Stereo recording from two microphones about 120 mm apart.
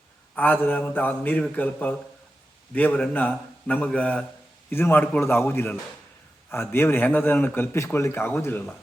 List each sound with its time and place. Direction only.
0.3 s a man's voice: 15° left (ahead or behind)